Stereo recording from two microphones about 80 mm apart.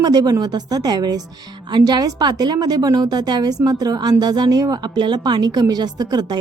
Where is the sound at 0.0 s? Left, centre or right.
Right.